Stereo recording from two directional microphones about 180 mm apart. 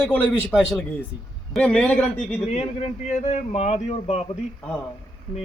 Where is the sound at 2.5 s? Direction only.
35° left (ahead or behind).